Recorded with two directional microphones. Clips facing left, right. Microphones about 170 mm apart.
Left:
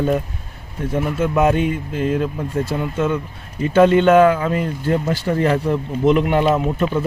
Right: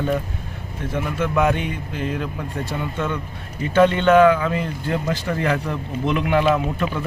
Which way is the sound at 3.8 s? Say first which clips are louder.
Left 2 dB; 35° left (ahead or behind).